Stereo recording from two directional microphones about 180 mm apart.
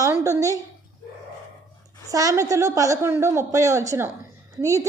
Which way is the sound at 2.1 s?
20° right (ahead or behind).